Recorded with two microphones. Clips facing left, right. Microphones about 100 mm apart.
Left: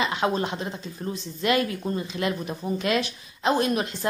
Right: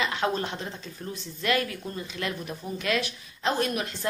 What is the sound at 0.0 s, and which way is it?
Speech, 20° left (ahead or behind).